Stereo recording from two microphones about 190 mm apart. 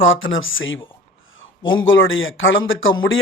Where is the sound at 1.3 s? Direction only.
90° left.